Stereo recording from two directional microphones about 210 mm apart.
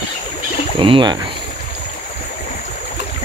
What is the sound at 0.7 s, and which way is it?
Speech, 25° right (ahead or behind).